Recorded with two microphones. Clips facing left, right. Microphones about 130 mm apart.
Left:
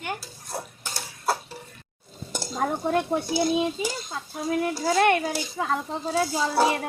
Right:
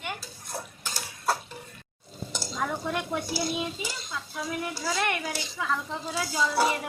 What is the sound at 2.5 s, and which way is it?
Speech, 45° left (ahead or behind).